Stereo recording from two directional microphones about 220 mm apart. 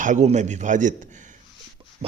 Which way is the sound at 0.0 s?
35° right (ahead or behind).